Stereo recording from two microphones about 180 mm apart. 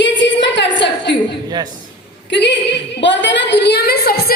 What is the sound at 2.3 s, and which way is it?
A woman's voice, 80° left.